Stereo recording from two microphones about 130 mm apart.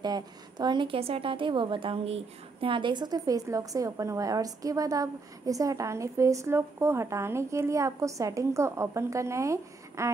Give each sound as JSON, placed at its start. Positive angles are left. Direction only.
{"t": 0.0, "sound": "a woman's voice", "side_deg": -30}